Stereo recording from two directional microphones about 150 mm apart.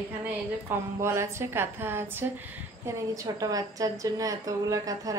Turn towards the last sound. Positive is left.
turn(degrees=-25)  # may be behind; listen again after turning